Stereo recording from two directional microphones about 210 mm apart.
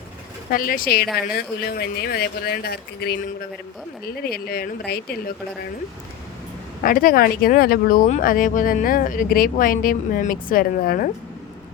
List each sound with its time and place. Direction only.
0.5 s speech: 40° left (ahead or behind)
6.8 s speech: 40° left (ahead or behind)